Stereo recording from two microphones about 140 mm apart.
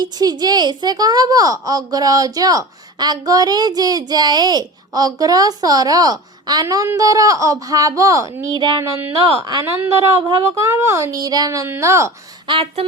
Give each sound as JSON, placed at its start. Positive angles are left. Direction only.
{"t": 0.0, "sound": "a woman's voice", "side_deg": -30}
{"t": 9.2, "sound": "speech", "side_deg": -30}
{"t": 9.6, "sound": "a woman's voice", "side_deg": -20}
{"t": 12.5, "sound": "speech", "side_deg": -40}